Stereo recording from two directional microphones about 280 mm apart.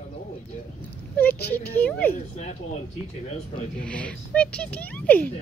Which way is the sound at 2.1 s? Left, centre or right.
Left.